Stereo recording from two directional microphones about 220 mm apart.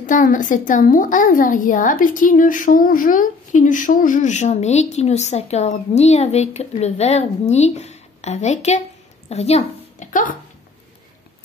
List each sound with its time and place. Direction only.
0.0 s a woman's voice: 35° left (ahead or behind)